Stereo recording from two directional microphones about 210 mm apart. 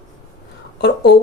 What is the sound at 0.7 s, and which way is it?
Speech, 50° left (ahead or behind).